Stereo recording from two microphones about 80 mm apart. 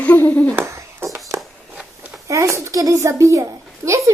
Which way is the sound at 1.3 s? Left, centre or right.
Centre.